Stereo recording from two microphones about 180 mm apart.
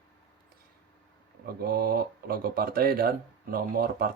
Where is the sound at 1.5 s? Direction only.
55° right (ahead or behind).